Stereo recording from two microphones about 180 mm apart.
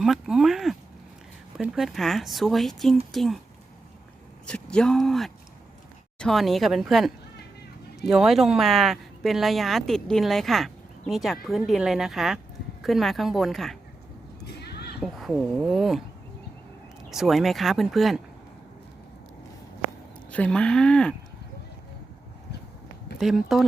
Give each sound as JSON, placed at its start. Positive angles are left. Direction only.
{"t": 0.0, "sound": "speech", "side_deg": -5}
{"t": 4.4, "sound": "speech", "side_deg": 5}
{"t": 14.4, "sound": "horse", "side_deg": 65}
{"t": 15.0, "sound": "speech", "side_deg": 0}
{"t": 17.1, "sound": "speech", "side_deg": 0}
{"t": 20.3, "sound": "speech", "side_deg": 5}
{"t": 23.2, "sound": "speech", "side_deg": 0}